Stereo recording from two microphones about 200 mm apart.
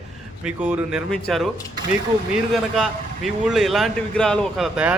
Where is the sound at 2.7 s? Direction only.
Centre (ahead or behind).